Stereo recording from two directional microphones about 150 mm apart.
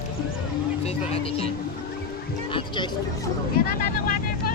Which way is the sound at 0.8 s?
40° left (ahead or behind).